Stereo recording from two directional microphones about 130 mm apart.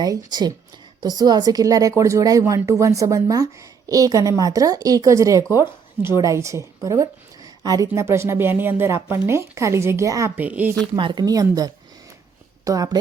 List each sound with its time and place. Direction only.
0.0 s a woman's voice: 30° right (ahead or behind); by 10.7 s 10° right (ahead or behind)
10.9 s a woman's voice: 35° right (ahead or behind)